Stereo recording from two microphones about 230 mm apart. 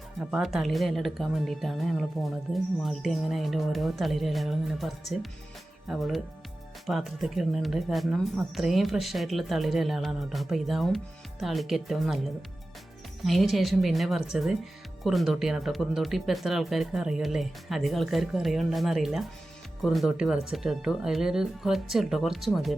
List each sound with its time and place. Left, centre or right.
0.2 s speech: centre